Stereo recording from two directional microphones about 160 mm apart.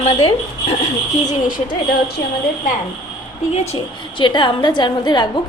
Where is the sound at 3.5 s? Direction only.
40° left (ahead or behind).